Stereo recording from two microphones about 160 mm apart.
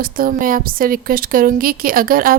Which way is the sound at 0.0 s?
65° right (ahead or behind).